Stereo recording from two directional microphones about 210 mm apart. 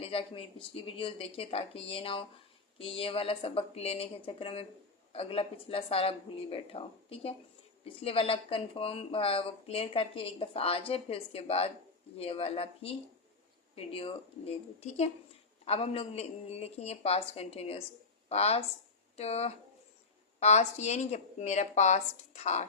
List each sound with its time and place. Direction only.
0.0 s a woman's voice: 25° left (ahead or behind)